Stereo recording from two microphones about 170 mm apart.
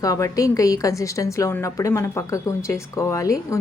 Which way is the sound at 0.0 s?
20° left (ahead or behind).